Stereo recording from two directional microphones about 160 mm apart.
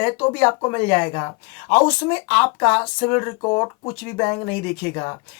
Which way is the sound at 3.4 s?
25° left (ahead or behind).